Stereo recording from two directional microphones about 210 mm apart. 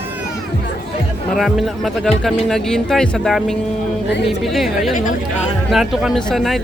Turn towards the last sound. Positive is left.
turn(degrees=0)  # may be behind; listen again after turning